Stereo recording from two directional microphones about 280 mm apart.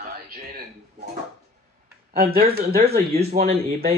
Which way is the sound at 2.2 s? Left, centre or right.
Right.